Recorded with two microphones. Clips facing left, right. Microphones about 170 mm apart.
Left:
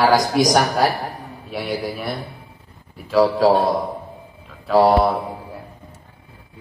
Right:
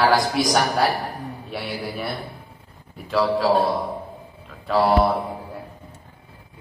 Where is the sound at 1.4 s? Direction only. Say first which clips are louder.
Left 6 dB; centre (ahead or behind).